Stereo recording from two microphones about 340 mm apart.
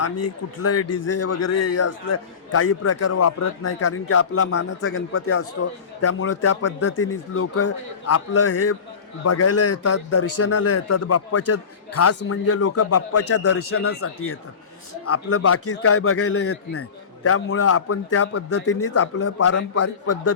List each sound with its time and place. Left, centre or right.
0.0 s a man's voice: left